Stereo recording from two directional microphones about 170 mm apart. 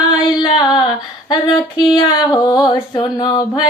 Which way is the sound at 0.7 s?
25° left (ahead or behind).